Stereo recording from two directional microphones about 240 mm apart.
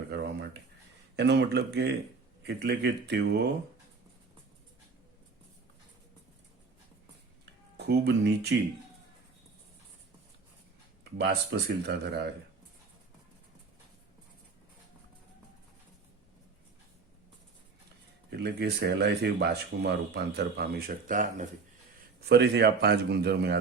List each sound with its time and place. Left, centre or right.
0.1 s a sound: right
1.1 s speech: right
7.9 s speech: right
11.2 s speech: right
18.3 s speech: right